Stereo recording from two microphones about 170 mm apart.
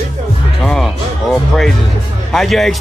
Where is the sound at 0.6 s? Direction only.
Centre (ahead or behind).